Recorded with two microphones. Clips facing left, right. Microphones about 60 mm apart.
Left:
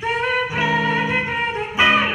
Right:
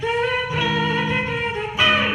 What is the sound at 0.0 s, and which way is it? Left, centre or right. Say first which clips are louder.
Music: left 1 dB; left.